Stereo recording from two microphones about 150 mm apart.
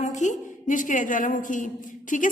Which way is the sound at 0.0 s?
55° left (ahead or behind).